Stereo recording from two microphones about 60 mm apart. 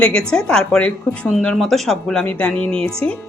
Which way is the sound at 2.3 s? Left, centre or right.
Left.